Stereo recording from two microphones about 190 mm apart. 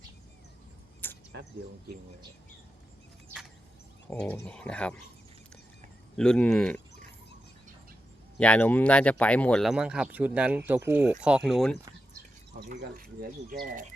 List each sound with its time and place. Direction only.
1.0 s a sound: 10° left (ahead or behind)
4.1 s speech: 5° left (ahead or behind)
6.1 s speech: 5° left (ahead or behind)
8.4 s speech: 5° left (ahead or behind)
13.5 s speech: 45° right (ahead or behind)